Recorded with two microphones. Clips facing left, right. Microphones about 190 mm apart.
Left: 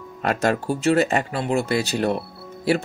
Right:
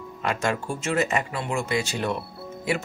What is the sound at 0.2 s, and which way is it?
Speech, 40° left (ahead or behind).